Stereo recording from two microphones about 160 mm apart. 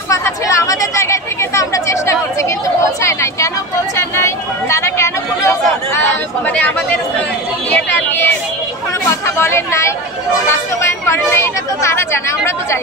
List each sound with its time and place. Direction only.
0.1 s chatter: 20° left (ahead or behind)
2.8 s speech: 20° left (ahead or behind)
3.9 s a sound: 20° left (ahead or behind)
7.7 s speech: 15° left (ahead or behind)
9.4 s speech: 15° left (ahead or behind)